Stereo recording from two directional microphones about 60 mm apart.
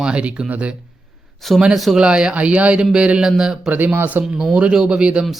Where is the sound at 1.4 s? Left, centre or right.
Centre.